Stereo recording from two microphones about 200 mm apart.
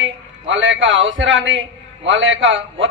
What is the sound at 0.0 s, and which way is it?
Speech, 70° right (ahead or behind).